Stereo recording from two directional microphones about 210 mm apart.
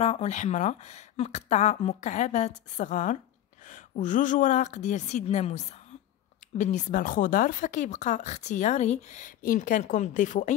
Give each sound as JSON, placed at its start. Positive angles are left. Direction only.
{"t": 0.0, "sound": "a woman's voice", "side_deg": 30}